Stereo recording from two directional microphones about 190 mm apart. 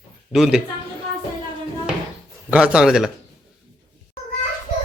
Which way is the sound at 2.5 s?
5° right (ahead or behind).